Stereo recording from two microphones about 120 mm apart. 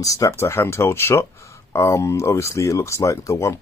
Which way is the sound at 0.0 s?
30° left (ahead or behind).